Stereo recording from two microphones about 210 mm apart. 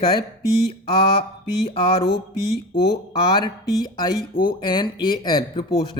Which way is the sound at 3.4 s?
20° left (ahead or behind).